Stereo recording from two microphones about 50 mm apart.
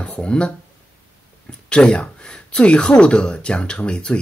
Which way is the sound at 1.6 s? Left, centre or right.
Left.